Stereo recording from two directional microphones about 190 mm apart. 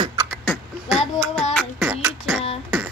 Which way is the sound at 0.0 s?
20° right (ahead or behind).